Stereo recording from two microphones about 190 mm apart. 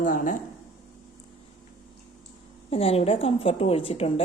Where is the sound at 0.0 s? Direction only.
45° left (ahead or behind).